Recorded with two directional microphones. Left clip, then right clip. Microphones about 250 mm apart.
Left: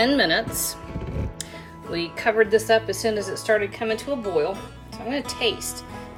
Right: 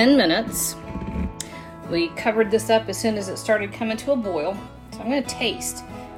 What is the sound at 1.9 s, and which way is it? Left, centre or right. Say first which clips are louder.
Speech: right 1 dB; right.